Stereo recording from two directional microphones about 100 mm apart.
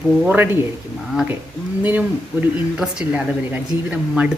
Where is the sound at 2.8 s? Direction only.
10° right (ahead or behind).